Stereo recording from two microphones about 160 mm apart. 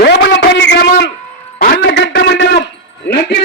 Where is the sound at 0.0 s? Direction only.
90° left.